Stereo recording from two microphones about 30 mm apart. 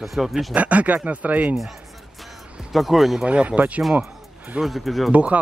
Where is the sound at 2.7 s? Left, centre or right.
Centre.